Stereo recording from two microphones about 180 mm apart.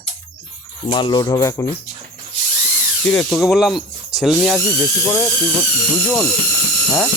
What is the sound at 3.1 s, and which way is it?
Speech, 5° left (ahead or behind).